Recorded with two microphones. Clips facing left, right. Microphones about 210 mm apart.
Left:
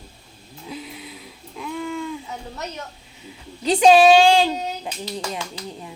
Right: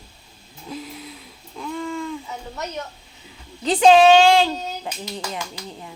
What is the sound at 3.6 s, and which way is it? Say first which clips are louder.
Speech: even; 15° left (ahead or behind).